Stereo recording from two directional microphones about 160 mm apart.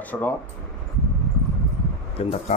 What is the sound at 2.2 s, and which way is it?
Speech, 35° left (ahead or behind).